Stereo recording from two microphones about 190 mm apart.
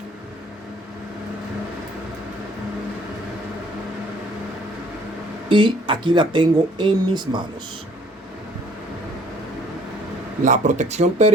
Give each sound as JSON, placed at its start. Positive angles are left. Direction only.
{"t": 5.5, "sound": "speech", "side_deg": -25}
{"t": 10.4, "sound": "speech", "side_deg": -40}